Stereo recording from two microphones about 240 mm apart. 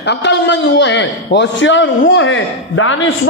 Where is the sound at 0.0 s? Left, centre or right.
Left.